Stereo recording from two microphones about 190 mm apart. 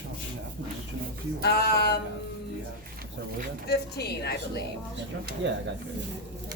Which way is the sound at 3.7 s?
60° left (ahead or behind).